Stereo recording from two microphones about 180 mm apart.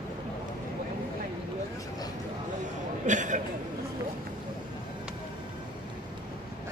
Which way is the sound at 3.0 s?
45° right (ahead or behind).